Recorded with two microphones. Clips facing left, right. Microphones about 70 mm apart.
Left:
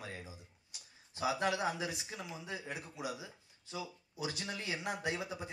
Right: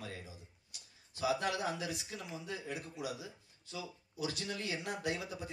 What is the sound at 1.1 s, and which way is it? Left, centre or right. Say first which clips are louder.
Speech: left 1 dB; left.